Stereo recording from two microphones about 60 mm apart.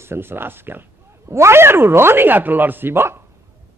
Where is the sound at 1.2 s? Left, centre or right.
Right.